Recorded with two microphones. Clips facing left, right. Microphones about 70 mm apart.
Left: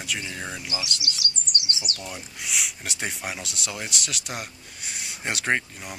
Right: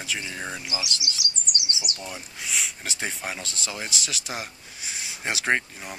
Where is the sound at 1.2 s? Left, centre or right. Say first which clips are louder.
Left 1 dB; right.